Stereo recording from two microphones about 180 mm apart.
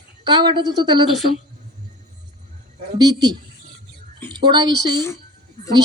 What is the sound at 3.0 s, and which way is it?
Speech, 20° right (ahead or behind).